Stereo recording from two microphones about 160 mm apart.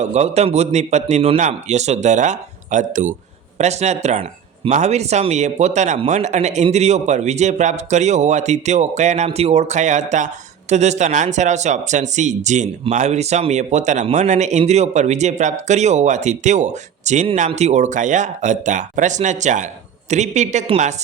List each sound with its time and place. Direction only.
0.0 s speech: 45° right (ahead or behind)